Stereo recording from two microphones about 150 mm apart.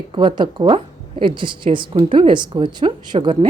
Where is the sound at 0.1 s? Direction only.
35° right (ahead or behind).